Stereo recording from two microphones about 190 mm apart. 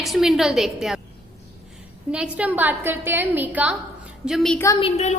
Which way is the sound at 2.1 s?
5° right (ahead or behind).